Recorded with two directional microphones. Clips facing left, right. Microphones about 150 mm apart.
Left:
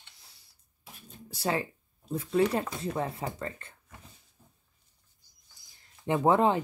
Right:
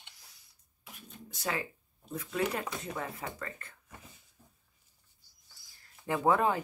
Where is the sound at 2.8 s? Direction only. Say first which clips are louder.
Left 6 dB; 30° left (ahead or behind).